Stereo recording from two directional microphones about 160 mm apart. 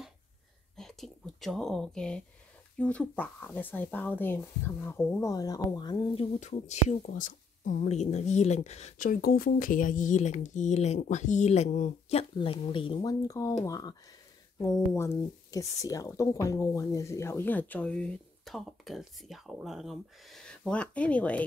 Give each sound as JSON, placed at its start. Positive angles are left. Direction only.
{"t": 0.7, "sound": "speech", "side_deg": 0}
{"t": 6.4, "sound": "speech", "side_deg": 45}
{"t": 13.3, "sound": "speech", "side_deg": 20}